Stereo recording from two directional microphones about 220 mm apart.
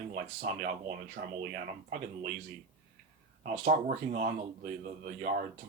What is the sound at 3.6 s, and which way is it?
Speech, 35° right (ahead or behind).